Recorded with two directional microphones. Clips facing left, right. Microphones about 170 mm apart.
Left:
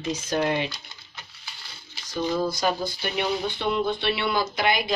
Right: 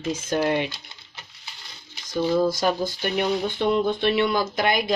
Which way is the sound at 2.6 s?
50° right (ahead or behind).